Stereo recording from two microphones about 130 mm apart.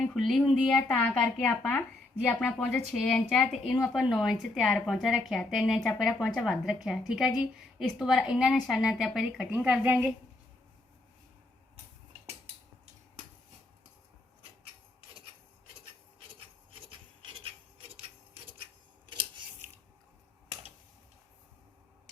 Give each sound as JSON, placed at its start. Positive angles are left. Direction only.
{"t": 0.0, "sound": "speech", "side_deg": 0}
{"t": 4.0, "sound": "a woman's voice", "side_deg": -5}